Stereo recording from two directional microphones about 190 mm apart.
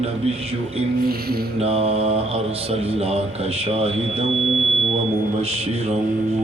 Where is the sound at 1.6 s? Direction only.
30° right (ahead or behind).